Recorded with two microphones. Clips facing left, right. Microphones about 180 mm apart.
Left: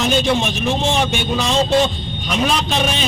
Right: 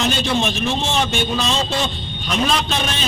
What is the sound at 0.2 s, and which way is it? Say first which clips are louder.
A man's voice: left 2 dB; 15° left (ahead or behind).